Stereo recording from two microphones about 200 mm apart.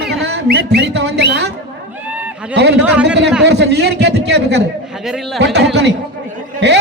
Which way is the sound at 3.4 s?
55° right (ahead or behind).